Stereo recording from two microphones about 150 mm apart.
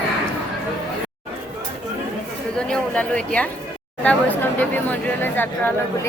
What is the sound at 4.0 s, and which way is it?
Speech, 10° left (ahead or behind).